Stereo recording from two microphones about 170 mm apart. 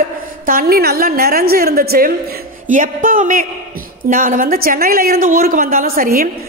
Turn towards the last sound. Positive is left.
turn(degrees=-55)  # may be behind; listen again after turning